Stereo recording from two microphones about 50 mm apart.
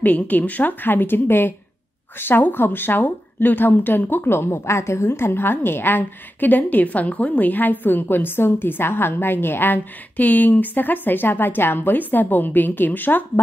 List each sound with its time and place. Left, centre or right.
0.0 s speech: left